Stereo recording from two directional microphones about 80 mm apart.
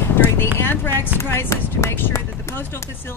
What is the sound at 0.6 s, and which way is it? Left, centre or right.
Speech, left.